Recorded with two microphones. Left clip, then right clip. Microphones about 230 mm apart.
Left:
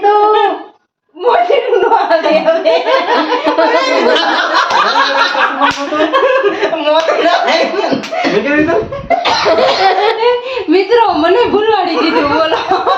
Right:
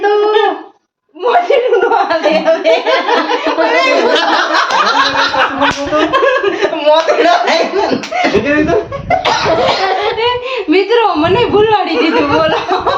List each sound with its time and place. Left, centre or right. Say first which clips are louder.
10.7 s a woman's voice: left 1 dB; centre